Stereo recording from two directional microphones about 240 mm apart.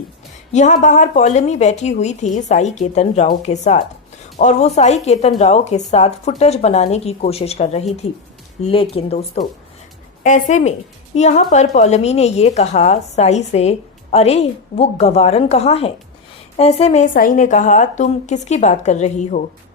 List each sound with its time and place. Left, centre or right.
0.5 s a woman's voice: left